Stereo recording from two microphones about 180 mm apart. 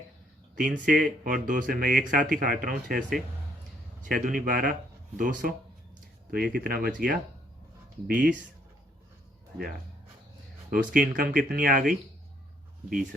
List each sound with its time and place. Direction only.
0.5 s speech: 45° right (ahead or behind)
4.0 s speech: 50° right (ahead or behind)
10.7 s speech: 50° right (ahead or behind)